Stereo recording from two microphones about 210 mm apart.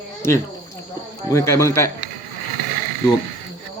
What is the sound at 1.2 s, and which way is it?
Speech, 15° left (ahead or behind).